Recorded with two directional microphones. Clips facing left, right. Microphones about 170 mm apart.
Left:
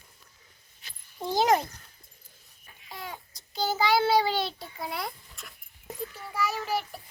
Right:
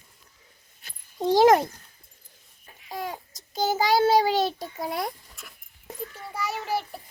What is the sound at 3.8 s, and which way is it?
A child's voice, 45° right (ahead or behind).